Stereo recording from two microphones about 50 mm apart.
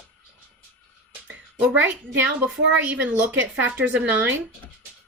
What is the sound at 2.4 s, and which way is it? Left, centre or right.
A woman's voice, right.